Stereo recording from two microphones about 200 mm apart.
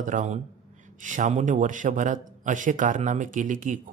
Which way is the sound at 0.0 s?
40° right (ahead or behind).